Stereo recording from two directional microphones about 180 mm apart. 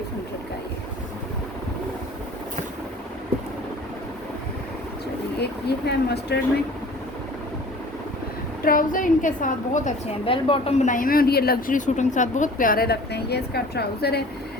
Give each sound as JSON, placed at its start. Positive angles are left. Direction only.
{"t": 5.4, "sound": "speech", "side_deg": 70}
{"t": 8.6, "sound": "speech", "side_deg": 50}
{"t": 10.2, "sound": "speech", "side_deg": 30}